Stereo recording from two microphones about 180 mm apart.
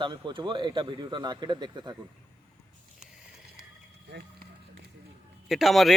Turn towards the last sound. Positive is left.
turn(degrees=0)  # may be behind; listen again after turning